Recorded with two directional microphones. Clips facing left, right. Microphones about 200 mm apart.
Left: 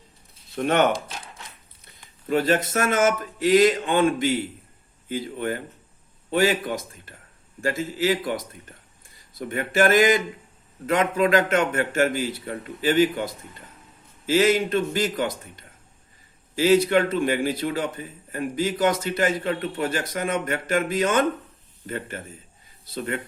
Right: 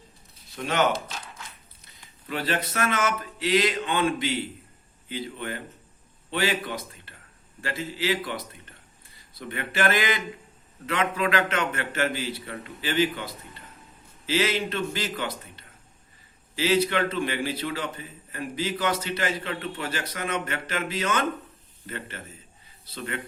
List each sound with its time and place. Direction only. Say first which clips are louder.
0.5 s speech: left 5 dB; 55° left (ahead or behind)
2.2 s a man's voice: left 7 dB; 45° left (ahead or behind)